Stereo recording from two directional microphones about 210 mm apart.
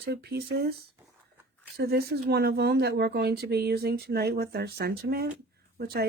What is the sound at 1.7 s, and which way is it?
Speech, 50° right (ahead or behind).